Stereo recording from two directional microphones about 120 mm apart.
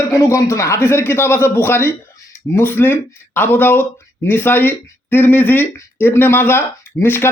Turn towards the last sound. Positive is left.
turn(degrees=20)  # may be behind; listen again after turning